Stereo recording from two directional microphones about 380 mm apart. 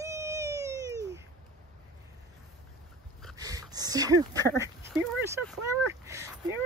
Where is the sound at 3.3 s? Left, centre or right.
Centre.